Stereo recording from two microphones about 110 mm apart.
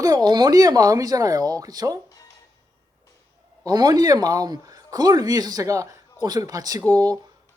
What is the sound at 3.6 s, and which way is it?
Speech, 35° right (ahead or behind).